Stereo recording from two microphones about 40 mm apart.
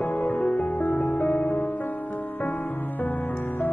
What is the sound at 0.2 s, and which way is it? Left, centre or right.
Music, left.